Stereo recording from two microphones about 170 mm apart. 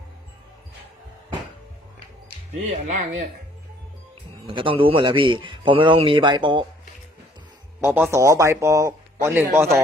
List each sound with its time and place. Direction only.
2.6 s speech: 45° right (ahead or behind)
4.4 s a man's voice: 30° right (ahead or behind)
7.9 s speech: 10° right (ahead or behind)